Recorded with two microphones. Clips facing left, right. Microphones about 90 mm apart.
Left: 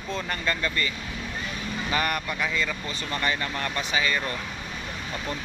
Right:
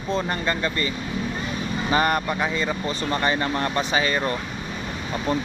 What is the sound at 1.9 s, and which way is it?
Speech, 30° right (ahead or behind).